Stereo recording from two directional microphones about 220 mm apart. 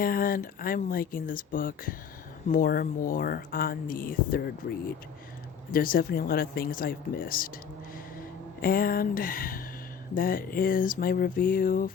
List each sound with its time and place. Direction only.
0.0 s speech: 40° left (ahead or behind)
5.7 s speech: 40° left (ahead or behind)
8.6 s speech: 40° left (ahead or behind)